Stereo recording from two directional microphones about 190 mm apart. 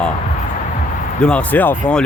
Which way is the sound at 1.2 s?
5° left (ahead or behind).